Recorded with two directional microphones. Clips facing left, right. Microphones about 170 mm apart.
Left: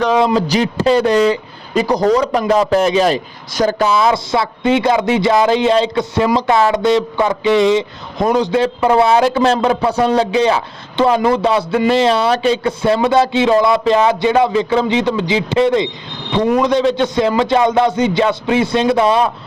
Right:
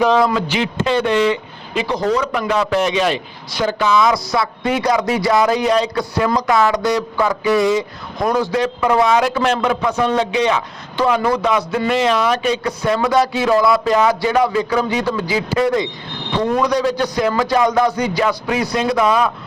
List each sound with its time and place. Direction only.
0.3 s a man's voice: 40° left (ahead or behind)